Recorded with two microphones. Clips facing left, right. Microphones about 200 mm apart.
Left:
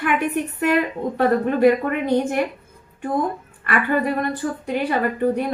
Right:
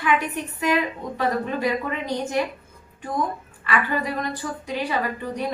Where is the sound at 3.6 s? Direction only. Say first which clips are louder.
Left 4 dB; 55° left (ahead or behind).